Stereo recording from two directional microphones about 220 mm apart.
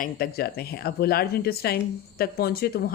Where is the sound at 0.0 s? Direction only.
45° left (ahead or behind).